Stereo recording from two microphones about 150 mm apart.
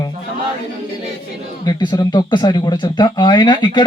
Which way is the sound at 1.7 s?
30° left (ahead or behind).